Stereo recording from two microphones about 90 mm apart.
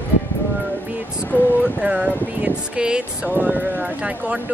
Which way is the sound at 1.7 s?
10° right (ahead or behind).